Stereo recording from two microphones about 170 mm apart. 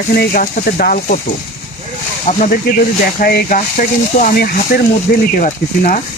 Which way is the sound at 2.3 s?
45° left (ahead or behind).